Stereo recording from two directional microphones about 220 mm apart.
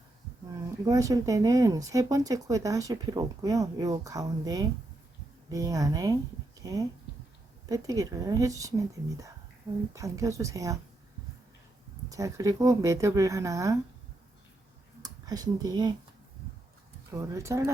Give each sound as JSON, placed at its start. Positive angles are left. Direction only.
{"t": 0.5, "sound": "speech", "side_deg": -15}
{"t": 12.0, "sound": "speech", "side_deg": -15}
{"t": 15.0, "sound": "speech", "side_deg": -15}
{"t": 17.1, "sound": "speech", "side_deg": -15}